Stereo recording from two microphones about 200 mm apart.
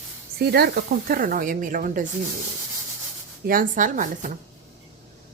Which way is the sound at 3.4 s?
45° right (ahead or behind).